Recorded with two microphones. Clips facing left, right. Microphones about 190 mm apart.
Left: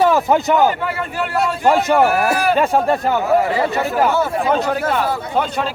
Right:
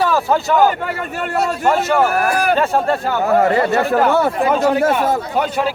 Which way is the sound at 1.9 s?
20° left (ahead or behind).